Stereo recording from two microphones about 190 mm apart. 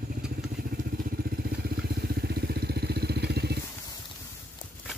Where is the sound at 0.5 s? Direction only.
50° right (ahead or behind).